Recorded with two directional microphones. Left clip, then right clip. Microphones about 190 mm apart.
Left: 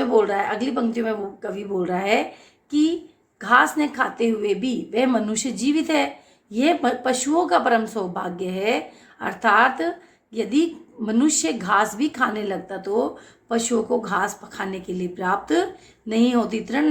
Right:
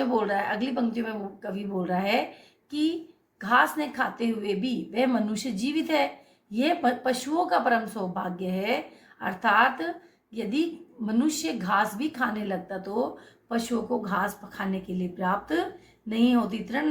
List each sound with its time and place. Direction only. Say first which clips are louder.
0.0 s a woman's voice: left 6 dB; 40° left (ahead or behind)
3.3 s a woman's voice: left 5 dB; 40° left (ahead or behind)